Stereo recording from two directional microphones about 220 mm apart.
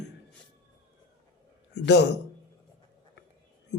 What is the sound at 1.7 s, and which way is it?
Speech, 50° left (ahead or behind).